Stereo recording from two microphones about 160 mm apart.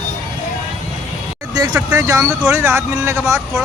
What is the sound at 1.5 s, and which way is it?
Speech, 25° right (ahead or behind).